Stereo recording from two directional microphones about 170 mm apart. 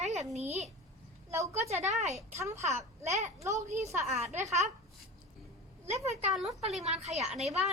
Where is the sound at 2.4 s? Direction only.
15° right (ahead or behind).